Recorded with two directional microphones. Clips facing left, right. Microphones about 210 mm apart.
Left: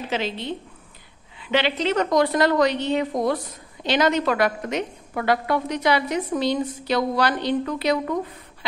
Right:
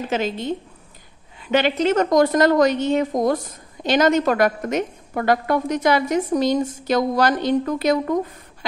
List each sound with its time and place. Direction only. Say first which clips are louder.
0.1 s a woman's voice: right 3 dB; 45° right (ahead or behind)